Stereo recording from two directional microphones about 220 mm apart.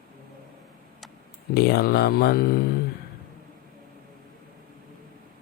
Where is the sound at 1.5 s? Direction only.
45° left (ahead or behind).